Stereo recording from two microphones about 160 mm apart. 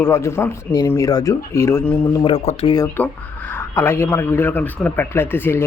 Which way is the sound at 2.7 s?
15° left (ahead or behind).